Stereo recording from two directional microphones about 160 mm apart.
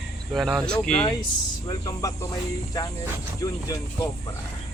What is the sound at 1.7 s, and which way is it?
Speech, 25° left (ahead or behind).